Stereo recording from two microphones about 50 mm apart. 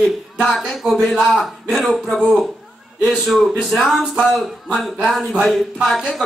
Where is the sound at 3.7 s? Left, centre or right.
Centre.